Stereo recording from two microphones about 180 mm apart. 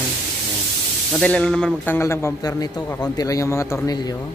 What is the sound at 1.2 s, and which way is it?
Speech, 5° left (ahead or behind).